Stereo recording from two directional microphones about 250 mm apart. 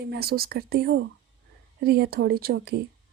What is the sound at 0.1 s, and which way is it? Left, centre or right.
A woman's voice, right.